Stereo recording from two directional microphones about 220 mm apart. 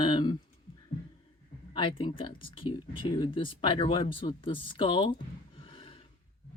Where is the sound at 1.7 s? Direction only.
25° left (ahead or behind).